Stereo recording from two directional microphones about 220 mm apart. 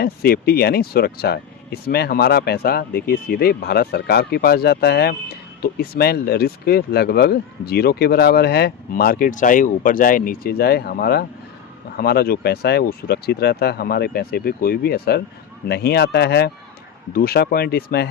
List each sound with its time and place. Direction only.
0.0 s speech: 45° left (ahead or behind)